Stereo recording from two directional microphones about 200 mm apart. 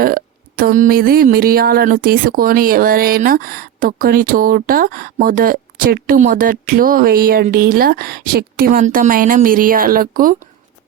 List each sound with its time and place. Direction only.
0.0 s speech: 45° right (ahead or behind)